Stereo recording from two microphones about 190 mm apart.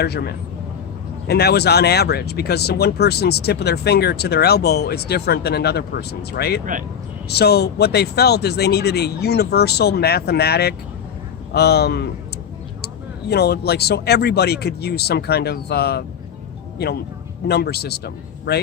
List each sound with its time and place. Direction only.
0.0 s speech: 55° left (ahead or behind)